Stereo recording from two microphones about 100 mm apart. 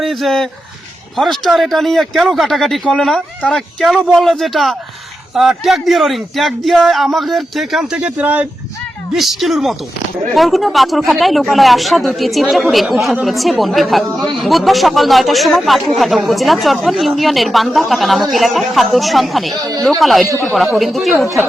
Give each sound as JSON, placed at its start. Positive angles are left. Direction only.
{"t": 0.0, "sound": "speech", "side_deg": 0}
{"t": 9.1, "sound": "speech", "side_deg": 0}
{"t": 19.5, "sound": "speech", "side_deg": -40}
{"t": 19.8, "sound": "speech", "side_deg": 5}